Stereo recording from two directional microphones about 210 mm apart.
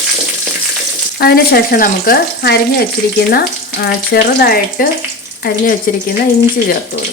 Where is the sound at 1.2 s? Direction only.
45° left (ahead or behind).